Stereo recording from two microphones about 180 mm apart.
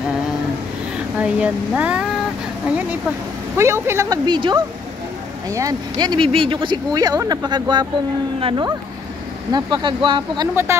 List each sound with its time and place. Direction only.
1.2 s speech: 5° right (ahead or behind)
3.5 s speech: 15° right (ahead or behind)